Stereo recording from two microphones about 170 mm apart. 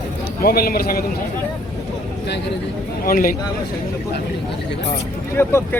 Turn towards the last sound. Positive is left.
turn(degrees=15)  # may be behind; listen again after turning